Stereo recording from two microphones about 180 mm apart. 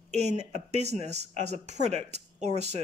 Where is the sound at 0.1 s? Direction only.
40° right (ahead or behind).